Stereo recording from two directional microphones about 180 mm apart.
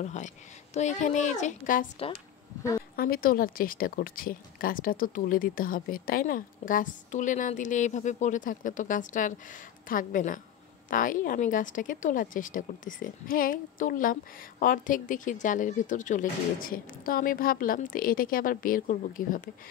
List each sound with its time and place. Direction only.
0.0 s a woman's voice: 40° left (ahead or behind)
3.0 s speech: 55° left (ahead or behind)